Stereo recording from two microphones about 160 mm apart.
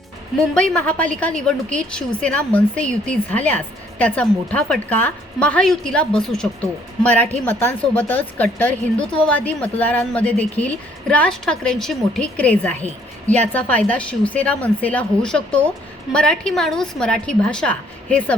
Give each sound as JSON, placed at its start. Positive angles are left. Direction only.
{"t": 0.5, "sound": "a woman's voice", "side_deg": 5}